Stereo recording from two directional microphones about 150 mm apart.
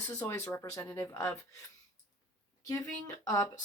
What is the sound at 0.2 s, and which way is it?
Speech, 15° left (ahead or behind).